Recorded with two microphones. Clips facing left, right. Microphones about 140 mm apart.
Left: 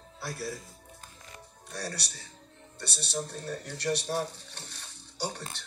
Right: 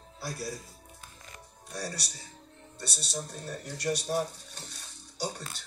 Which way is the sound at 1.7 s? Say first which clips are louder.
Even; 65° left (ahead or behind).